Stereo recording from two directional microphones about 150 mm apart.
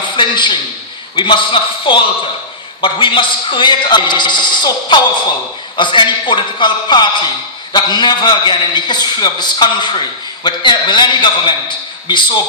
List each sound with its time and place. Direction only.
0.2 s a man's voice: 30° left (ahead or behind)